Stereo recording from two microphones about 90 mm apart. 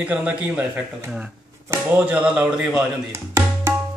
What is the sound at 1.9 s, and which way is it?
Speech, 15° right (ahead or behind).